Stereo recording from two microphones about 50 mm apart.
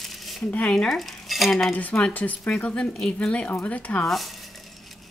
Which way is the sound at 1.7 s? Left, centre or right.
Left.